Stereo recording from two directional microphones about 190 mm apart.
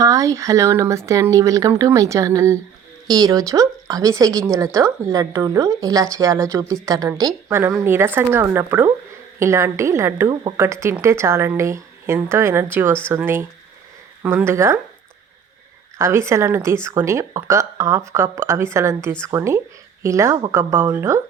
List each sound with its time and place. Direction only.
0.0 s a woman's voice: 15° right (ahead or behind)
16.0 s speech: 15° right (ahead or behind)